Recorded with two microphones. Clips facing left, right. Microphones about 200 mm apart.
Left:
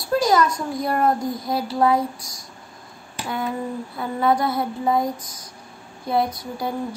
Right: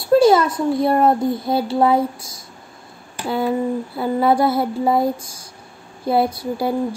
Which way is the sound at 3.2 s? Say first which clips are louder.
Right 7 dB; 30° right (ahead or behind).